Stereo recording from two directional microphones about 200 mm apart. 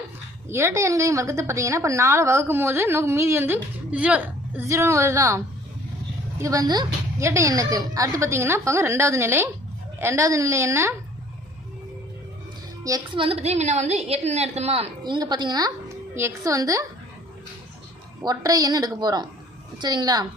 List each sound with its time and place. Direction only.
0.4 s a woman's voice: 15° right (ahead or behind)
6.4 s a woman's voice: 15° right (ahead or behind)
12.8 s a woman's voice: 20° right (ahead or behind)
18.2 s a woman's voice: 20° right (ahead or behind)